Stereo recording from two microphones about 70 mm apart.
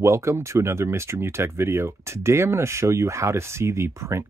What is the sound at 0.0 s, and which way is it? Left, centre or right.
Speech, right.